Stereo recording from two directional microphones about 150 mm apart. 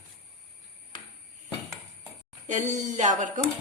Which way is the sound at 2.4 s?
55° right (ahead or behind).